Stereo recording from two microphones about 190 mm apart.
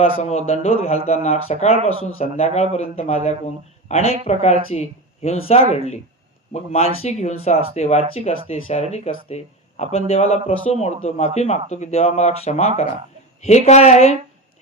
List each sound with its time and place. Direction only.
0.0 s speech: 35° left (ahead or behind)